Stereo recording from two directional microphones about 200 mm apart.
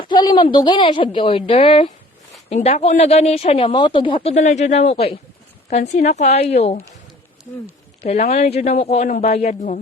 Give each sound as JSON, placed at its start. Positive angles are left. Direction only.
{"t": 0.0, "sound": "speech", "side_deg": 20}
{"t": 8.0, "sound": "speech", "side_deg": 35}